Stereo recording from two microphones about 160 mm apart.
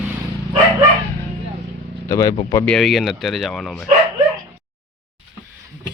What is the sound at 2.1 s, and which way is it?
Speech, 20° left (ahead or behind).